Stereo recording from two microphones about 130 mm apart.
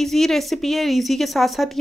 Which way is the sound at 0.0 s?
5° left (ahead or behind).